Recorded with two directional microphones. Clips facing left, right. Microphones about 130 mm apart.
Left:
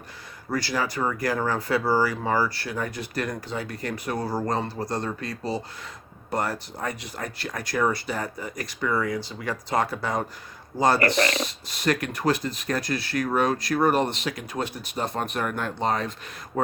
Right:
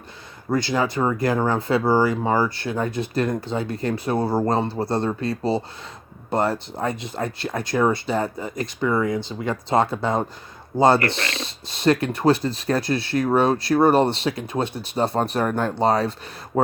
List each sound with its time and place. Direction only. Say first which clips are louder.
0.5 s speech: right 5 dB; 25° right (ahead or behind)